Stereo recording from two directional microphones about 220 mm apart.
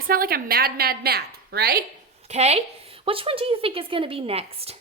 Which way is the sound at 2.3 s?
30° right (ahead or behind).